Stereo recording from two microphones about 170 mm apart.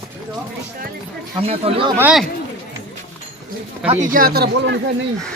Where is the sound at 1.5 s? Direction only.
35° right (ahead or behind).